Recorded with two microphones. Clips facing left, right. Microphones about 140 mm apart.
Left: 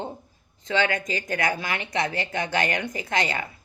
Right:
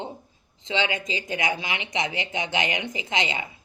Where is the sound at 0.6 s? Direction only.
50° left (ahead or behind).